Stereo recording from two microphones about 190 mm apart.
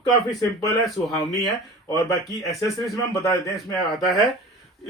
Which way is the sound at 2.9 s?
15° left (ahead or behind).